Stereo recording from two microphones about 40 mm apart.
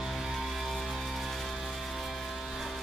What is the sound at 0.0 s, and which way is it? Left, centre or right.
Music, centre.